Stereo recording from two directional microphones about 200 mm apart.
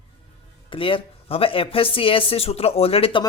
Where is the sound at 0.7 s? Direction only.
25° left (ahead or behind).